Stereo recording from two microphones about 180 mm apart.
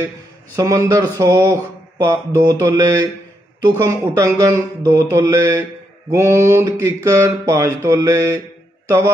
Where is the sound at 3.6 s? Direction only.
15° right (ahead or behind).